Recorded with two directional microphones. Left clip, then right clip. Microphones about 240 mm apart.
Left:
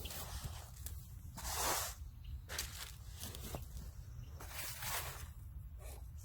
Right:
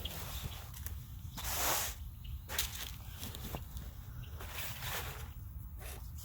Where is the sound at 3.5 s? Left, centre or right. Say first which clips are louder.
Right 3 dB; left.